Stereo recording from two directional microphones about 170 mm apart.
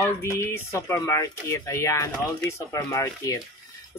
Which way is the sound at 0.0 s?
15° left (ahead or behind).